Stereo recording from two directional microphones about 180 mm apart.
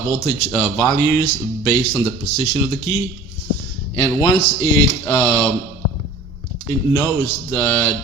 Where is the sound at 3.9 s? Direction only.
20° left (ahead or behind).